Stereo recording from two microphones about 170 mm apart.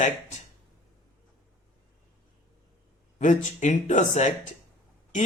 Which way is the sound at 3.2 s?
45° left (ahead or behind).